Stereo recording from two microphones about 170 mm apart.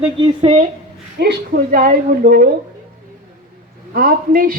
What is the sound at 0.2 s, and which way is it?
Speech, 40° right (ahead or behind).